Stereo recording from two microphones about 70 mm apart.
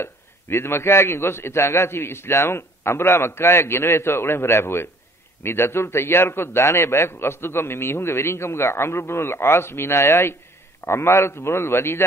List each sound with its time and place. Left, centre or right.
0.0 s a man's voice: left